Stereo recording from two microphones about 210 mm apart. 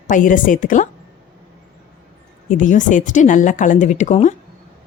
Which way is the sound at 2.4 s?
35° left (ahead or behind).